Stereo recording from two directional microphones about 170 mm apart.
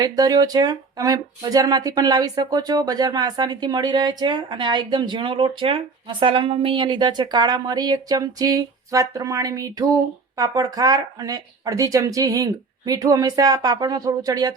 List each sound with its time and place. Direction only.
0.0 s speech: 20° right (ahead or behind)